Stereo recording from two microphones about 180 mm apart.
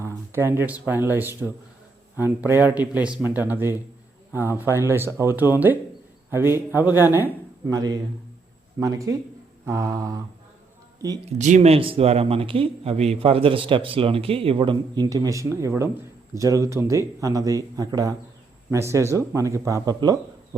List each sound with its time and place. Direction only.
0.0 s a man's voice: 10° right (ahead or behind)
11.3 s a man's voice: 40° right (ahead or behind); by 20.6 s 20° right (ahead or behind)